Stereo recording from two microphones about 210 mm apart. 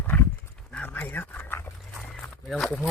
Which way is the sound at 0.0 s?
10° left (ahead or behind).